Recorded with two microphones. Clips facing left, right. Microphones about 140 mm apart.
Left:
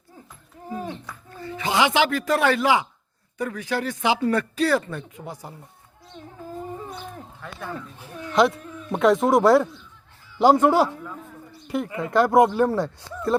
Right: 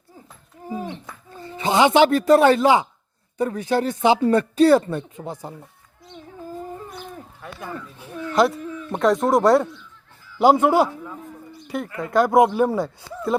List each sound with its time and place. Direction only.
0.9 s speech: 20° right (ahead or behind)
8.3 s speech: centre (ahead or behind)
11.9 s speech: 10° left (ahead or behind)